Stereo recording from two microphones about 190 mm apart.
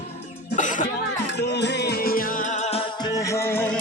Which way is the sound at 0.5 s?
40° left (ahead or behind).